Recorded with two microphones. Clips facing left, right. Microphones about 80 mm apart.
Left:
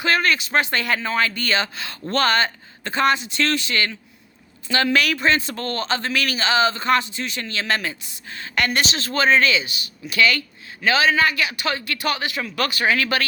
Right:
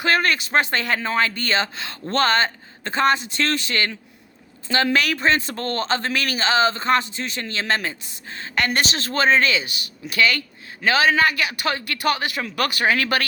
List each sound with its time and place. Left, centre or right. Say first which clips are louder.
0.0 s speech: even; right
8.8 s speech: even; right